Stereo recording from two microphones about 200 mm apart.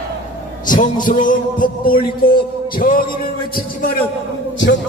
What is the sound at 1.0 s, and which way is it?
Music, 40° left (ahead or behind).